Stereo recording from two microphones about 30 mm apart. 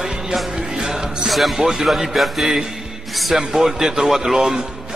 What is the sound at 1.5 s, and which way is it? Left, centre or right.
Speech, centre.